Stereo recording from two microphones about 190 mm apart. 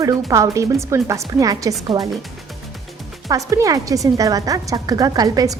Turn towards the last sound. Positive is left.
turn(degrees=-20)  # may be behind; listen again after turning